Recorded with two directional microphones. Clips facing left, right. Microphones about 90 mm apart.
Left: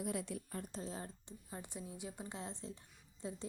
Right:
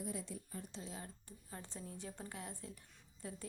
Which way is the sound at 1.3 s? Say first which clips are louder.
Left 3 dB; 15° left (ahead or behind).